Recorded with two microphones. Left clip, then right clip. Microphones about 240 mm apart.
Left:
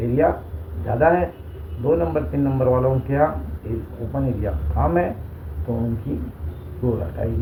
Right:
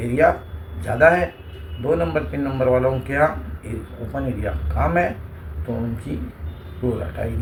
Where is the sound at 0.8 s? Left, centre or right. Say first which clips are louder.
Right 2 dB; right.